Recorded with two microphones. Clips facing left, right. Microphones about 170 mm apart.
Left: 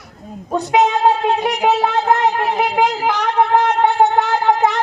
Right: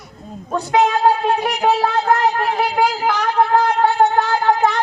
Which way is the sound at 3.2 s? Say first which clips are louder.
Left 1 dB; centre (ahead or behind).